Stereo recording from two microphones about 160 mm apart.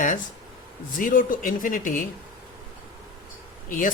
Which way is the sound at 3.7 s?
55° left (ahead or behind).